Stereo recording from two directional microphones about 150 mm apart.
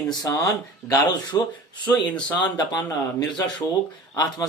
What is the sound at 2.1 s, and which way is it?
Speech, 10° left (ahead or behind).